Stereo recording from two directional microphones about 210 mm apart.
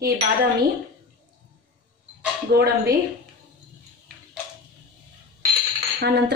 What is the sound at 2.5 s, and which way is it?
Speech, 50° right (ahead or behind).